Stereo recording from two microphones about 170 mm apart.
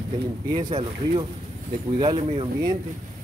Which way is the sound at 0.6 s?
30° right (ahead or behind).